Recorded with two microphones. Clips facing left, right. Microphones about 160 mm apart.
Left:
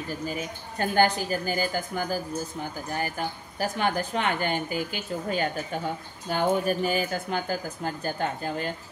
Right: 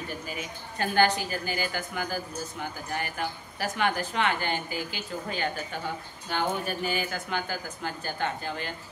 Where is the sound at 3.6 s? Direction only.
40° left (ahead or behind).